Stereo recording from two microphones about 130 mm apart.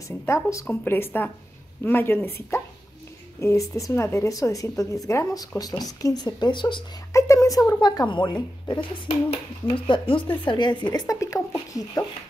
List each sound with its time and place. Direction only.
0.3 s a woman's voice: 25° left (ahead or behind)
7.1 s a woman's voice: 25° left (ahead or behind)